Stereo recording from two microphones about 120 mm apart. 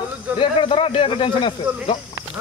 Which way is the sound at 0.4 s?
45° left (ahead or behind).